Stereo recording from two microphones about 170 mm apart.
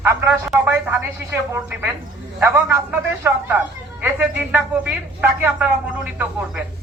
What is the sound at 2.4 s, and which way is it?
A man's voice, 15° right (ahead or behind).